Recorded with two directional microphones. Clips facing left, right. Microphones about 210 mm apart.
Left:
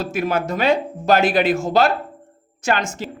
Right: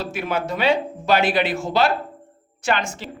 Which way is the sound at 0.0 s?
45° left (ahead or behind).